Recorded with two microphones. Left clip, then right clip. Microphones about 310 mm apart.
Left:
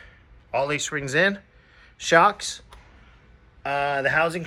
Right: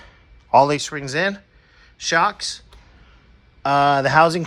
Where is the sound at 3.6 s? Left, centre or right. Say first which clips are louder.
Right 7 dB; right.